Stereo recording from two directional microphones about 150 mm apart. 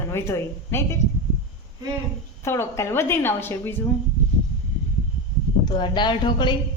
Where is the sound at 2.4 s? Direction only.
15° left (ahead or behind).